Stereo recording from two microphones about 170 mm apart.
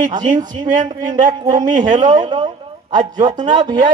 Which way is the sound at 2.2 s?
25° right (ahead or behind).